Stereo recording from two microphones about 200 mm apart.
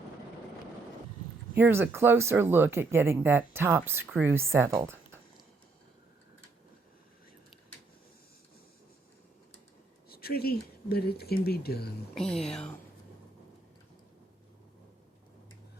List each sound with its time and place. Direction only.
1.5 s speech: 10° right (ahead or behind)
10.1 s speech: 50° left (ahead or behind)
12.1 s speech: centre (ahead or behind)